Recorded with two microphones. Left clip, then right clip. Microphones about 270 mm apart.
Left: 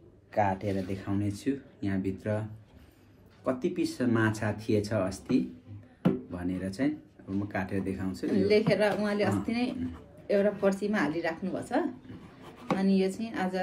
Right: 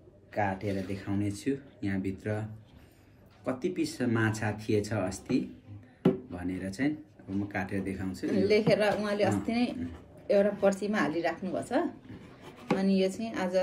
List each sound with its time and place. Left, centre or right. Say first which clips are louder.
0.3 s speech: left 3 dB; centre
3.4 s speech: left 2 dB; centre
8.3 s a woman's voice: even; centre
12.7 s a woman's voice: even; centre